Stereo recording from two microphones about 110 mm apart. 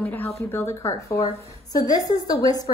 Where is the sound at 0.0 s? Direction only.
15° left (ahead or behind).